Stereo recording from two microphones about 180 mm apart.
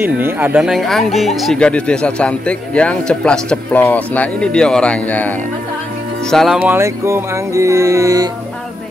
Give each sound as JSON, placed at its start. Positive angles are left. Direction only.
{"t": 0.0, "sound": "speech", "side_deg": -10}
{"t": 6.3, "sound": "music", "side_deg": 0}